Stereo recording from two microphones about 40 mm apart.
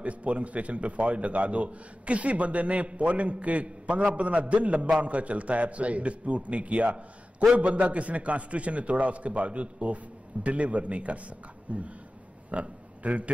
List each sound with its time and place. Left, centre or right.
0.0 s a man's voice: right